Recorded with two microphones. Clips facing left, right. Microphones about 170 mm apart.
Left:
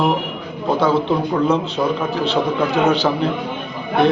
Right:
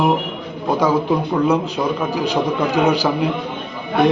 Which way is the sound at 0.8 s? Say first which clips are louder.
Even; 10° right (ahead or behind).